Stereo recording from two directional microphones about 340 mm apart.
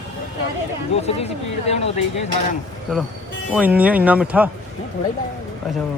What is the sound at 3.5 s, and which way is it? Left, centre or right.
Speech, centre.